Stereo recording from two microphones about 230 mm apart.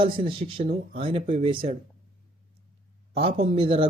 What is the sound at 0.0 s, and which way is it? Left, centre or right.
Speech, right.